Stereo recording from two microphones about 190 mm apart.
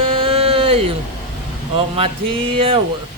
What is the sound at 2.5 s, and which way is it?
Speech, 30° right (ahead or behind).